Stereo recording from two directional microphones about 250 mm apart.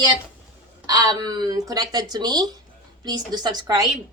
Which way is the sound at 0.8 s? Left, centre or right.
Centre.